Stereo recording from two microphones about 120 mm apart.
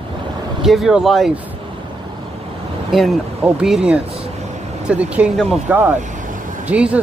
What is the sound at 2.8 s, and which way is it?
Speech, centre (ahead or behind).